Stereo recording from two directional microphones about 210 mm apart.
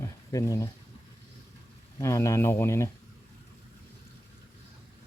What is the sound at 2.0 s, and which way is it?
Speech, 15° left (ahead or behind).